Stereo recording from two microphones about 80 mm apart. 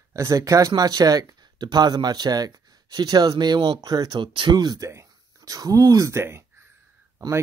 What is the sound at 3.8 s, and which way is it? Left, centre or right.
Speech, right.